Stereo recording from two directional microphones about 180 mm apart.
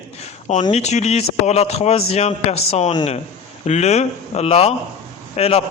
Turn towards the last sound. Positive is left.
turn(degrees=35)  # may be behind; listen again after turning